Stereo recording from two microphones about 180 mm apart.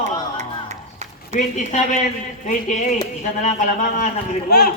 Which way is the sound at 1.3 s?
40° left (ahead or behind).